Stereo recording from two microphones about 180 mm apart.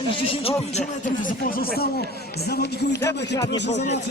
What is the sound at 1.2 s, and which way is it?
Speech, 50° left (ahead or behind).